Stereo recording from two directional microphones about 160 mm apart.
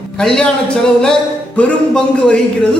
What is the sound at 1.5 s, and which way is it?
Speech, 5° left (ahead or behind).